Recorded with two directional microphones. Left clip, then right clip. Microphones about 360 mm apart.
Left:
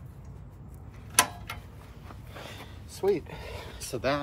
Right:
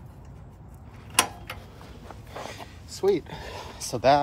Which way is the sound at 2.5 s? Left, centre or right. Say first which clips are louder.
Right 5 dB; centre.